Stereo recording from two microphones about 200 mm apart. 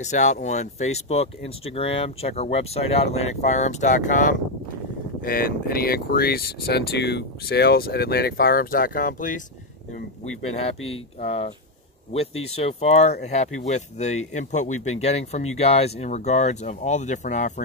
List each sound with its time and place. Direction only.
0.0 s speech: 35° left (ahead or behind)
10.5 s speech: 30° left (ahead or behind)